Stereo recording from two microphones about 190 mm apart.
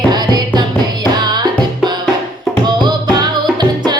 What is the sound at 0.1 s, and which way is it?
Music, 20° right (ahead or behind).